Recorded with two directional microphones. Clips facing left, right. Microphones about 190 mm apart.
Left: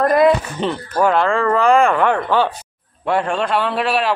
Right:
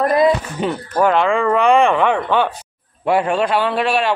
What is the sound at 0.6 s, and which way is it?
A man's voice, 5° right (ahead or behind).